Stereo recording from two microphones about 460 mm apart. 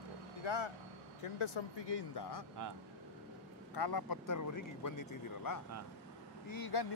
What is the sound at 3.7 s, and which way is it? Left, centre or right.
Speech, left.